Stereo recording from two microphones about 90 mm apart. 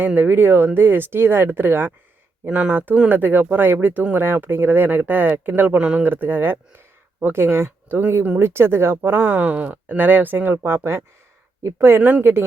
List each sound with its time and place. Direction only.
0.0 s speech: 20° right (ahead or behind)
6.1 s speech: 20° right (ahead or behind)